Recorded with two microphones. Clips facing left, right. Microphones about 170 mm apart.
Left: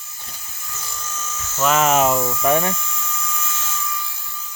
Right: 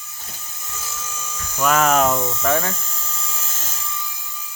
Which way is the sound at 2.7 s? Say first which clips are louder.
Left 4 dB; 35° right (ahead or behind).